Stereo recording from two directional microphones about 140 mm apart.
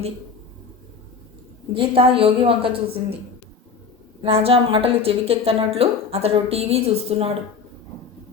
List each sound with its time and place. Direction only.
1.7 s a woman's voice: 40° right (ahead or behind)
4.2 s a woman's voice: 45° right (ahead or behind)